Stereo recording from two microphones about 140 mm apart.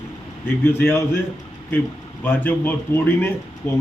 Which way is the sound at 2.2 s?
15° left (ahead or behind).